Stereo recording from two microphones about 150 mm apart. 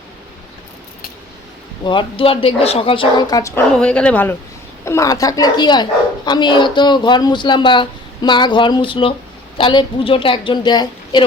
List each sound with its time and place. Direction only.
1.8 s speech: 30° left (ahead or behind)
3.8 s speech: 5° left (ahead or behind)
4.9 s speech: 20° left (ahead or behind)